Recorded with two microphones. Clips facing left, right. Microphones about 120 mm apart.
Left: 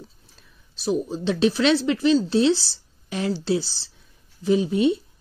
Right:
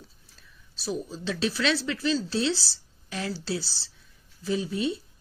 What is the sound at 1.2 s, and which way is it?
Speech, 25° left (ahead or behind).